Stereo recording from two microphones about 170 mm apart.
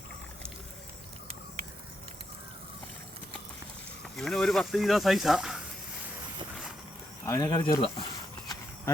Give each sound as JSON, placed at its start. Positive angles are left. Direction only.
{"t": 4.0, "sound": "speech", "side_deg": 0}
{"t": 7.3, "sound": "speech", "side_deg": 20}